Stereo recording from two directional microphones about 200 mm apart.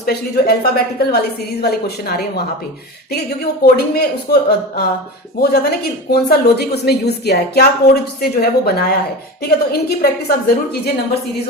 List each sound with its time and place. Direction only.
0.0 s a woman's voice: 50° left (ahead or behind)